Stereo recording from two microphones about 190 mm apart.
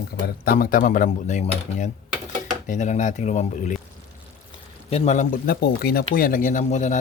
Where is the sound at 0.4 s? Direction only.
45° left (ahead or behind).